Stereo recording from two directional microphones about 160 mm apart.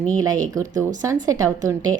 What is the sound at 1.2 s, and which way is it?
Speech, 20° right (ahead or behind).